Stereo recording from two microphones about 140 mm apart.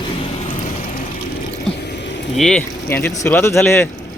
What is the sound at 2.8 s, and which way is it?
Speech, 15° left (ahead or behind).